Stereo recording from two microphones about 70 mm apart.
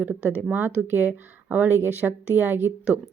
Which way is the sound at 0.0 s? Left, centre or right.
Right.